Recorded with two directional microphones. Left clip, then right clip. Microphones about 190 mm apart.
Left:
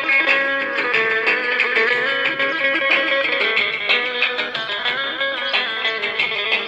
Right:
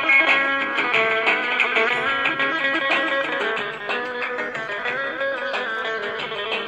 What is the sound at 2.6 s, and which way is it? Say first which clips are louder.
Music: left 6 dB; 30° right (ahead or behind).